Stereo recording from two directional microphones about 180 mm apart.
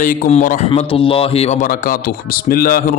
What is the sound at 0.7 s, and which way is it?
A man's voice, 30° left (ahead or behind).